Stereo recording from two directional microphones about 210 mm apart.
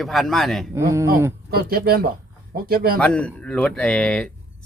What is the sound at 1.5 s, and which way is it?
A man's voice, 45° right (ahead or behind).